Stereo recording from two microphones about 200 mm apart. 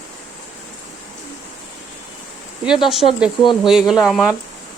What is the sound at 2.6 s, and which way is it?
Speech, centre (ahead or behind).